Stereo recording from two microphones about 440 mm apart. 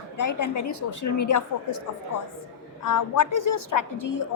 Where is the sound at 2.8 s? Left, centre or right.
Left.